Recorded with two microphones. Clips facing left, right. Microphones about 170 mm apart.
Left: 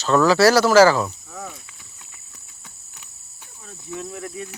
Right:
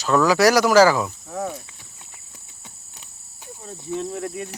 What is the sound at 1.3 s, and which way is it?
Cricket, 40° right (ahead or behind).